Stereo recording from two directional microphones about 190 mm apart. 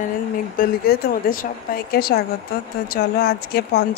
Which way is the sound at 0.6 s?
45° left (ahead or behind).